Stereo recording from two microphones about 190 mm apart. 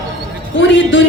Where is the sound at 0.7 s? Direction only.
80° left.